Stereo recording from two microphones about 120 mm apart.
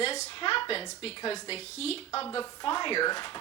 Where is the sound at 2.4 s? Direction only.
40° left (ahead or behind).